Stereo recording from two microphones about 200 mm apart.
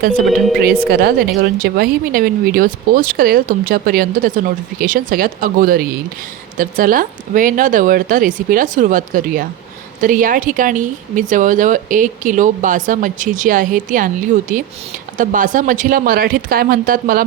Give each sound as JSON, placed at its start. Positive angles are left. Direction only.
{"t": 0.6, "sound": "a woman's voice", "side_deg": -50}